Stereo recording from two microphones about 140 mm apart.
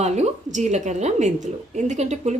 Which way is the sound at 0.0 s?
55° right (ahead or behind).